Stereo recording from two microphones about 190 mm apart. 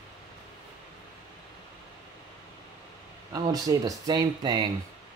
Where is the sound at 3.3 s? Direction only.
20° right (ahead or behind).